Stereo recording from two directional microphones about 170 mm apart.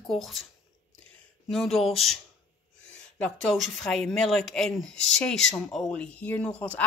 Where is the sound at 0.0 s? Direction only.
Centre (ahead or behind).